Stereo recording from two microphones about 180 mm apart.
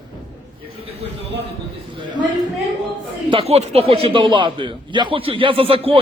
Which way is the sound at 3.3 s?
30° right (ahead or behind).